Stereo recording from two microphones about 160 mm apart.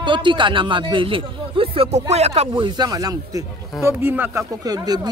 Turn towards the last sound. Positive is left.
turn(degrees=-25)  # may be behind; listen again after turning